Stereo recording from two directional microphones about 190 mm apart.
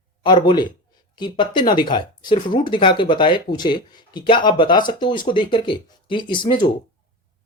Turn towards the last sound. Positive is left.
turn(degrees=25)  # may be behind; listen again after turning